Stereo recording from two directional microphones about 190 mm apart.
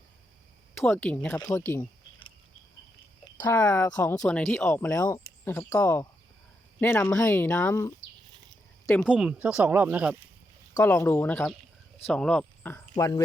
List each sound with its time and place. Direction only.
0.7 s speech: 10° left (ahead or behind)
3.5 s speech: 10° left (ahead or behind)
9.0 s speech: 5° right (ahead or behind)
10.8 s speech: 15° left (ahead or behind)